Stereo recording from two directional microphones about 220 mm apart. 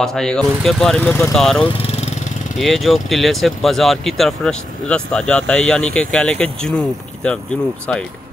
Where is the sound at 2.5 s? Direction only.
Centre (ahead or behind).